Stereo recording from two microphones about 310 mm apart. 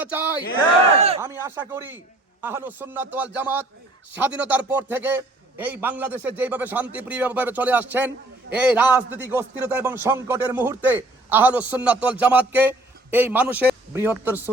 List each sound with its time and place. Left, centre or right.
0.0 s speech: centre
0.9 s speech: centre
1.2 s a man's voice: centre